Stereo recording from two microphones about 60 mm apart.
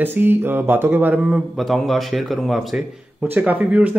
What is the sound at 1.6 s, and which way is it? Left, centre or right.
Speech, centre.